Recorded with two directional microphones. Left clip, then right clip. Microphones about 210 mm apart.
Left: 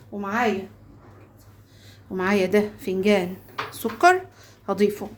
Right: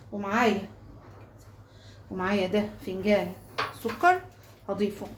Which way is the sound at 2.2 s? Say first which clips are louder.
Left 6 dB; 50° left (ahead or behind).